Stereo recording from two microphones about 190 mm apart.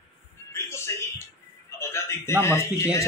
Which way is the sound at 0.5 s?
15° left (ahead or behind).